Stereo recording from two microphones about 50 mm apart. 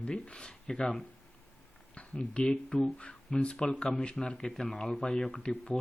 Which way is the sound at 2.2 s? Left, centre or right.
Left.